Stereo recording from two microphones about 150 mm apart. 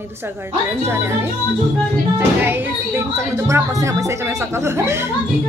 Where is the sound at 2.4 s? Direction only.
15° right (ahead or behind).